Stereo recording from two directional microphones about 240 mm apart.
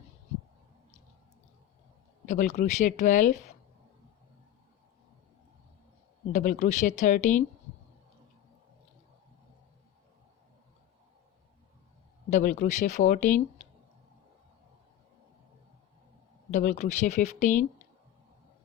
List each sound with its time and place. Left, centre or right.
2.2 s speech: left
6.3 s speech: left
12.3 s speech: left
16.5 s speech: left